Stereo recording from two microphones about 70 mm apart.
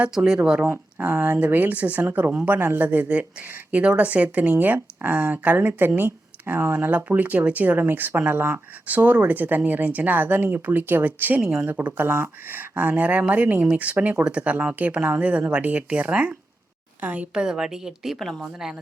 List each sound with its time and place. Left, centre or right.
0.2 s speech: right
0.6 s a woman's voice: right
8.9 s a woman's voice: right; by 18.4 s centre
18.6 s a woman's voice: centre